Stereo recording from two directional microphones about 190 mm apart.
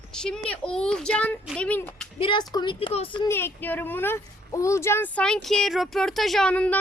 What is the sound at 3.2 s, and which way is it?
A woman's voice, 10° left (ahead or behind).